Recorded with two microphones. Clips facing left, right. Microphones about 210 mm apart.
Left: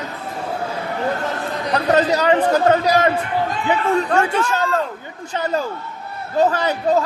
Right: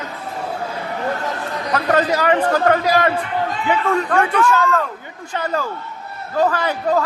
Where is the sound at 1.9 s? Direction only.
20° left (ahead or behind).